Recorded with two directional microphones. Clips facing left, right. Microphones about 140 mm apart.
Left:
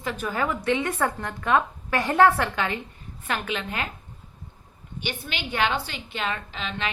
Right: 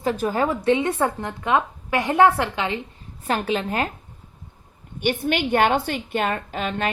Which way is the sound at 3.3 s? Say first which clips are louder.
Right 6 dB; 35° right (ahead or behind).